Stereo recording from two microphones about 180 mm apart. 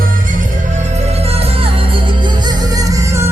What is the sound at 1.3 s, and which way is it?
Music, 35° right (ahead or behind).